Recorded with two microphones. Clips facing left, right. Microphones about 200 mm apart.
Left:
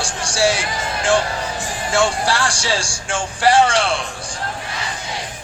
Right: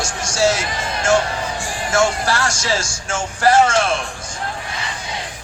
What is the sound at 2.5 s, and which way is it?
Speech, 30° left (ahead or behind).